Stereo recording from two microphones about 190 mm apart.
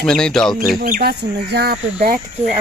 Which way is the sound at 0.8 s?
50° right (ahead or behind).